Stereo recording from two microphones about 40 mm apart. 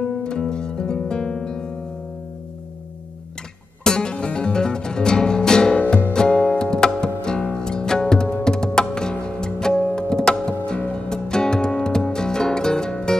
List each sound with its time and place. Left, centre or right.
0.2 s music: left
3.8 s music: centre